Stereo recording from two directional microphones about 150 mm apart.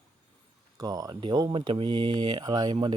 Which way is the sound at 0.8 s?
25° right (ahead or behind).